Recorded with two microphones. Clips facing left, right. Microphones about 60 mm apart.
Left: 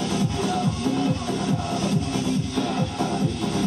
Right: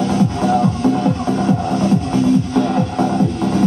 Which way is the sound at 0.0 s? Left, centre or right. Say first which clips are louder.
Right 8 dB; right.